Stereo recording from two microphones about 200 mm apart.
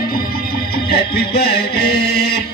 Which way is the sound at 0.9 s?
50° left (ahead or behind).